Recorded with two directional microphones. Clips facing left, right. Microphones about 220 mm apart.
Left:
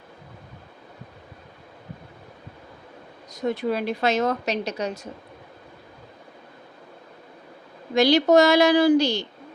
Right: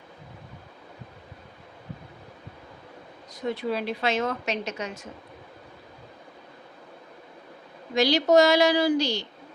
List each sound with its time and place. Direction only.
3.3 s a woman's voice: 45° left (ahead or behind)
7.9 s a woman's voice: 55° left (ahead or behind)